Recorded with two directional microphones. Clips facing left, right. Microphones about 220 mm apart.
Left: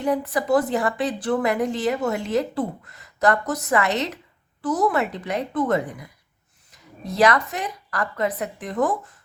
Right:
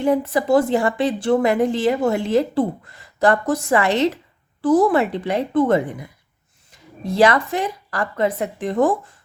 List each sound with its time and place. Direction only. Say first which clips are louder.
0.0 s speech: right 5 dB; 25° right (ahead or behind)